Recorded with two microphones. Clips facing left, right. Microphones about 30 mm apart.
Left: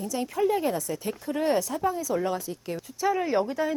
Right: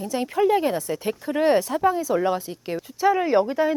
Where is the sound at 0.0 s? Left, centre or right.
Right.